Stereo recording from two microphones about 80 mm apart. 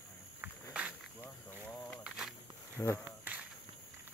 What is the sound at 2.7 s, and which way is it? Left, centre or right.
Speech, left.